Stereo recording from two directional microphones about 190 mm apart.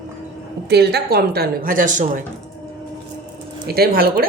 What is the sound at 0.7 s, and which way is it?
A woman's voice, 60° right (ahead or behind).